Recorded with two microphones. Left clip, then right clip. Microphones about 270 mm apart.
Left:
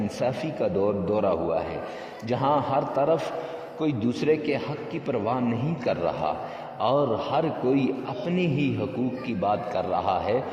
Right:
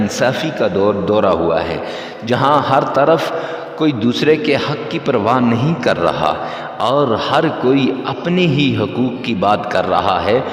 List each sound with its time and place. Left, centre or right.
0.2 s a man's voice: right